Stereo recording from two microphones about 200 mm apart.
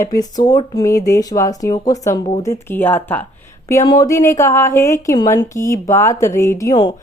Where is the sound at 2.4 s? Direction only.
15° left (ahead or behind).